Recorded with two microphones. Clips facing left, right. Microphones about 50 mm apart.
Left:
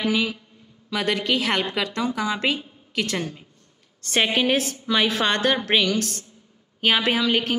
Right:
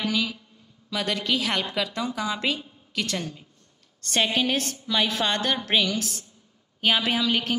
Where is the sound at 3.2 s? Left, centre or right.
Left.